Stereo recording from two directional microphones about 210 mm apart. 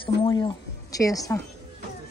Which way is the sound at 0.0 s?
20° left (ahead or behind).